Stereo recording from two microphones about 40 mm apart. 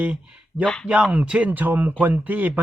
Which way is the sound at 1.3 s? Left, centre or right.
Right.